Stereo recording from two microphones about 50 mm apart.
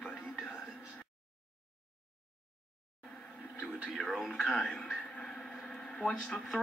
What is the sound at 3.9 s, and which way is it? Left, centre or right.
Speech, centre.